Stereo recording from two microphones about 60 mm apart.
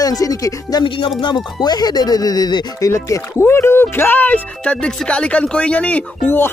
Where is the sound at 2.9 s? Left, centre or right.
Left.